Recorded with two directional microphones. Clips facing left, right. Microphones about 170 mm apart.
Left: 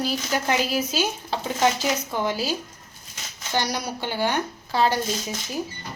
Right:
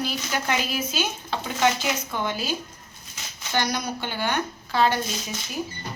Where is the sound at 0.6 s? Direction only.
35° left (ahead or behind).